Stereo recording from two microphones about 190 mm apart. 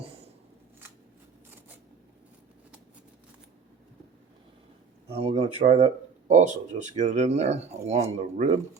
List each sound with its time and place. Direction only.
5.0 s speech: 30° right (ahead or behind)